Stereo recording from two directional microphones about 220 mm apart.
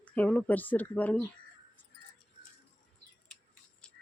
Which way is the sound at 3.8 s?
5° left (ahead or behind).